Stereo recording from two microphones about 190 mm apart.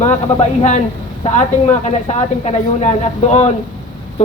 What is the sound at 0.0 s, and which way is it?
Speech, 40° left (ahead or behind).